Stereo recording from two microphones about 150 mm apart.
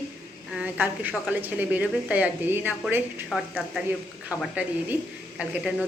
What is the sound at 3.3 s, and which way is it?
A woman's voice, centre (ahead or behind).